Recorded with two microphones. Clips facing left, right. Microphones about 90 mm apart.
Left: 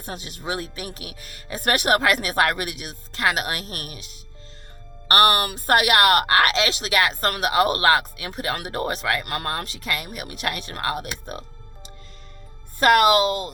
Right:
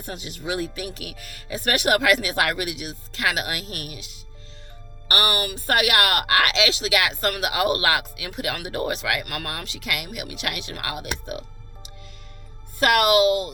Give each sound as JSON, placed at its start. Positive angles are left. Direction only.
{"t": 0.0, "sound": "speech", "side_deg": 40}
{"t": 12.8, "sound": "speech", "side_deg": 45}